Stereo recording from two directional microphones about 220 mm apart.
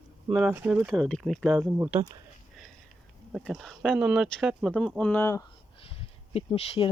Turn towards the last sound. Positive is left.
turn(degrees=25)  # may be behind; listen again after turning